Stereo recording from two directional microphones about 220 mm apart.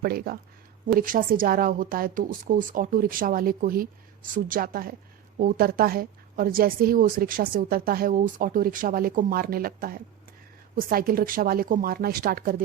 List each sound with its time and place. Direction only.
0.0 s a woman's voice: 45° right (ahead or behind)